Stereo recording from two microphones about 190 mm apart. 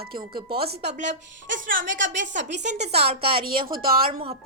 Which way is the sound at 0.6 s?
55° right (ahead or behind).